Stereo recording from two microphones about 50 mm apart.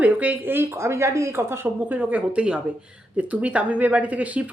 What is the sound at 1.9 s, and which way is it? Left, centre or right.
Speech, right.